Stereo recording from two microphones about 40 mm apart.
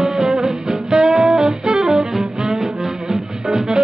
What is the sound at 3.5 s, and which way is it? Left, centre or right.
Music, centre.